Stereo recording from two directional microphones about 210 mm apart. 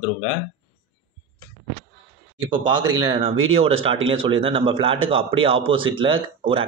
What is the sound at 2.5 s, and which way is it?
Speech, 20° right (ahead or behind).